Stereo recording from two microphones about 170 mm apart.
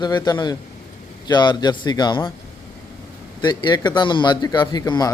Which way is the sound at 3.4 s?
25° left (ahead or behind).